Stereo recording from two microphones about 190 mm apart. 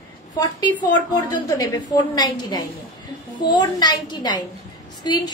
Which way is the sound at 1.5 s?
20° left (ahead or behind).